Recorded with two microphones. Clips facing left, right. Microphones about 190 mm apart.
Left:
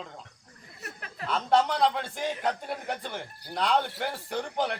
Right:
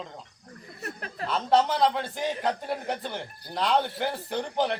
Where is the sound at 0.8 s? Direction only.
35° right (ahead or behind).